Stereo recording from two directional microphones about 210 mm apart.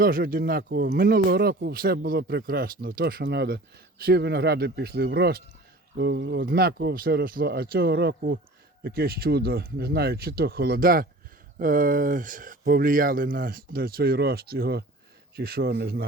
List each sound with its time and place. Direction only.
0.0 s speech: 40° right (ahead or behind)